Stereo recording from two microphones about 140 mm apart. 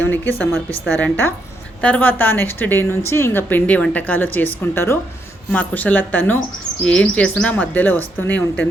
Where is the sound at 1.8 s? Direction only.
10° left (ahead or behind).